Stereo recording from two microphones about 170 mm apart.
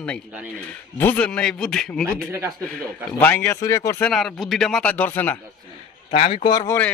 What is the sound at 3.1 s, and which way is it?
Speech, 10° left (ahead or behind).